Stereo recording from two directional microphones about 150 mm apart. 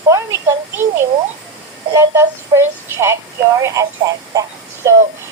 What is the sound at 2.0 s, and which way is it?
A woman's voice, 20° right (ahead or behind).